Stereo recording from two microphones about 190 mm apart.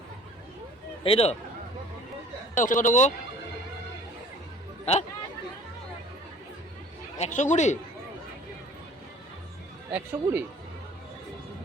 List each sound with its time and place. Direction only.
1.0 s speech: 30° left (ahead or behind)
2.6 s speech: 40° left (ahead or behind)
7.2 s speech: 40° left (ahead or behind)
9.9 s speech: 10° right (ahead or behind)